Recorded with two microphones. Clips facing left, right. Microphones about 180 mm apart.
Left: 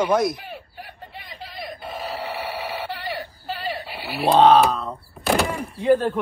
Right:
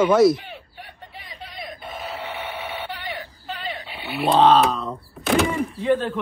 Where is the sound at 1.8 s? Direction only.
30° left (ahead or behind).